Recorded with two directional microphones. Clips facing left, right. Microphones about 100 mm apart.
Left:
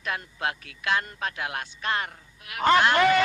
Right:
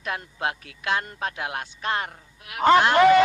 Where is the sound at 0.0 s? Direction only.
25° right (ahead or behind).